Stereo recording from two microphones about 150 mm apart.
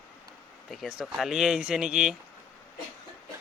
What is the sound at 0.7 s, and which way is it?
Speech, centre (ahead or behind).